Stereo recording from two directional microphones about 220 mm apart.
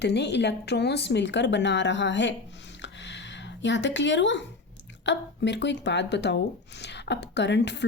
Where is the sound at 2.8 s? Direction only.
55° left (ahead or behind).